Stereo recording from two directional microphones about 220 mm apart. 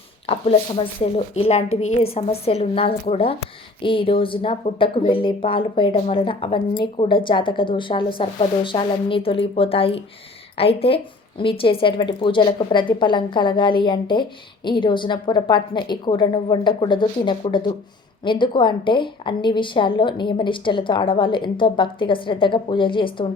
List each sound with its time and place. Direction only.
0.3 s a woman's voice: 25° left (ahead or behind)